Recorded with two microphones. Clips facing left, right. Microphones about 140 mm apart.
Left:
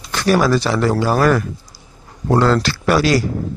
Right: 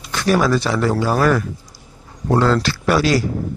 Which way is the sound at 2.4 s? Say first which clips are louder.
Left 1 dB; 70° left (ahead or behind).